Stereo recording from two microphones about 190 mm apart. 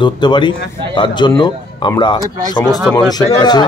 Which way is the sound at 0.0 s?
25° left (ahead or behind).